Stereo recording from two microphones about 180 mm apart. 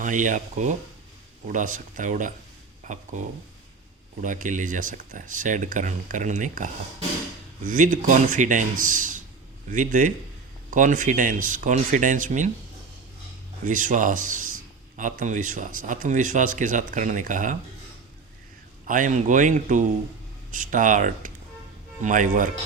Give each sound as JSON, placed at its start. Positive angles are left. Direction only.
{"t": 0.0, "sound": "speech", "side_deg": -45}
{"t": 13.7, "sound": "speech", "side_deg": -45}
{"t": 18.9, "sound": "speech", "side_deg": -45}